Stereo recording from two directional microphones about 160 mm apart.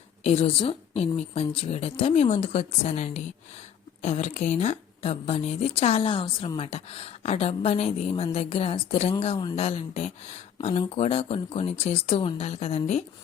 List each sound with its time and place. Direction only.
0.2 s a woman's voice: 40° left (ahead or behind)